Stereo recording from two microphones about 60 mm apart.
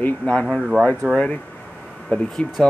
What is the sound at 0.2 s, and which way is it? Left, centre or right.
Speech, centre.